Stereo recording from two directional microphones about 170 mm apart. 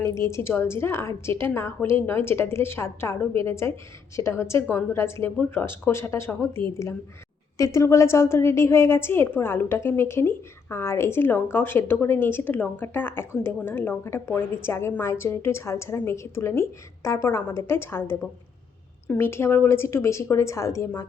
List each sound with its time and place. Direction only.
0.0 s a woman's voice: 15° left (ahead or behind)